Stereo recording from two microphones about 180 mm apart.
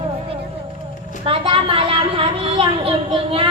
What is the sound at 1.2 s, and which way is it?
A woman's voice, 30° right (ahead or behind).